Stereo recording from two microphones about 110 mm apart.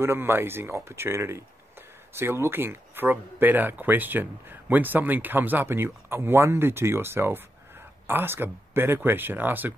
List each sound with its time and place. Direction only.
0.0 s speech: 20° right (ahead or behind)